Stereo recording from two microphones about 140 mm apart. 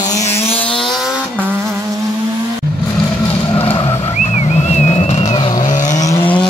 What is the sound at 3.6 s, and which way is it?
Vehicle, 45° left (ahead or behind).